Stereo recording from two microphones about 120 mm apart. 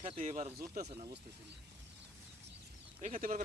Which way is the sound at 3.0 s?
90° right.